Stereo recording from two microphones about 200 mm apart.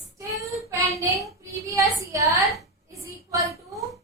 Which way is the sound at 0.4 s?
15° right (ahead or behind).